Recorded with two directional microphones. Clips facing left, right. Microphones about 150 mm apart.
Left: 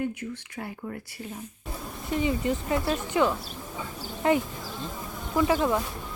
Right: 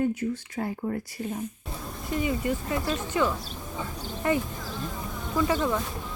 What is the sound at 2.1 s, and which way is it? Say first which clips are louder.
Speech: left 1 dB; 25° left (ahead or behind).